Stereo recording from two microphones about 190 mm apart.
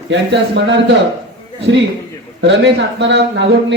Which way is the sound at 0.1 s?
70° right (ahead or behind).